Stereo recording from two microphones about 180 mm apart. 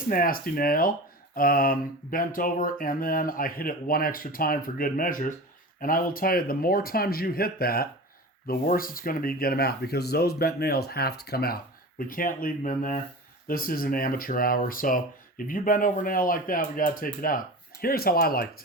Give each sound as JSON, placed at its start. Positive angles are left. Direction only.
{"t": 0.1, "sound": "speech", "side_deg": 55}